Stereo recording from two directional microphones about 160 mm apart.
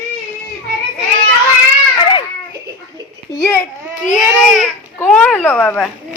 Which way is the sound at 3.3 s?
20° left (ahead or behind).